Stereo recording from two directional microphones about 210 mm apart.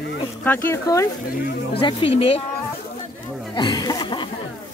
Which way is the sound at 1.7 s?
25° left (ahead or behind).